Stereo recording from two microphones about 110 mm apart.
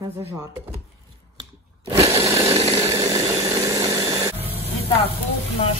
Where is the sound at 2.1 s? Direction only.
30° right (ahead or behind).